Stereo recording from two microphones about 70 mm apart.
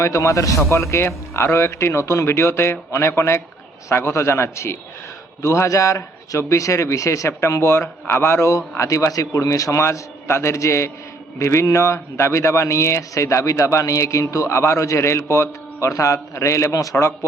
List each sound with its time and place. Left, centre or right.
0.0 s speech: left